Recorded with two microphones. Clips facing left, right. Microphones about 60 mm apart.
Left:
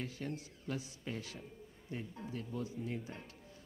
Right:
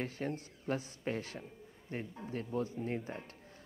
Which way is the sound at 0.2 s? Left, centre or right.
Right.